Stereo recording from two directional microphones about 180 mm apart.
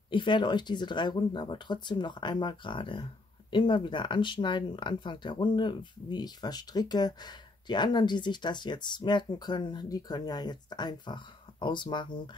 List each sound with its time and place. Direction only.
0.1 s speech: 25° left (ahead or behind)